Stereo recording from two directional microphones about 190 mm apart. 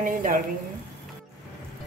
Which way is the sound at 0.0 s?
45° right (ahead or behind).